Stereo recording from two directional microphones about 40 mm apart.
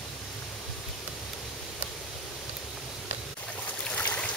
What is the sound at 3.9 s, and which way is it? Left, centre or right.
Stream, left.